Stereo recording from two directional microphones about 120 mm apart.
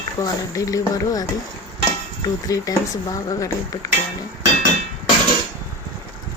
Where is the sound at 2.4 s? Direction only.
30° left (ahead or behind).